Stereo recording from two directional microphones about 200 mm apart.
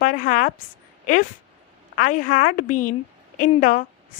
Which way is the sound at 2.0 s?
40° left (ahead or behind).